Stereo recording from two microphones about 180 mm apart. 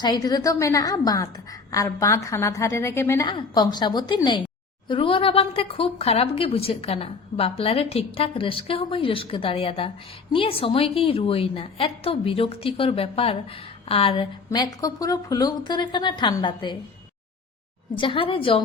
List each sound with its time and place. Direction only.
0.0 s a woman's voice: 20° left (ahead or behind)
17.9 s speech: 25° left (ahead or behind)